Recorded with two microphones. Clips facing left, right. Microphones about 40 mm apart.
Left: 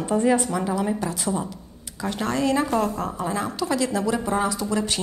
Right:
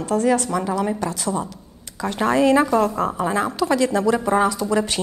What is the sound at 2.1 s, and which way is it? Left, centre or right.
A woman's voice, centre.